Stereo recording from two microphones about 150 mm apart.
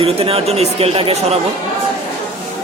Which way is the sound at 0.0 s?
40° right (ahead or behind).